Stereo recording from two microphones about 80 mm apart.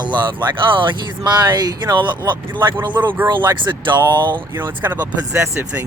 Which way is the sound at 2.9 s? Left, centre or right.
Right.